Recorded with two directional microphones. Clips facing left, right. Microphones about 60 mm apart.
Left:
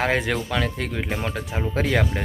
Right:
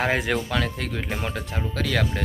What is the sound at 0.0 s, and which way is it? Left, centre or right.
Speech, centre.